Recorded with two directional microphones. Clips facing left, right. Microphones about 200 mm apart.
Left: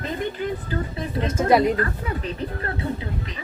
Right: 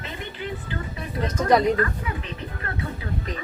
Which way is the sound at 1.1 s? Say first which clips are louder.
Left 2 dB; 25° left (ahead or behind).